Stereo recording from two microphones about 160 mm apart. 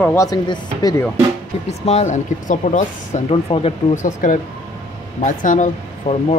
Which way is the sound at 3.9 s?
50° left (ahead or behind).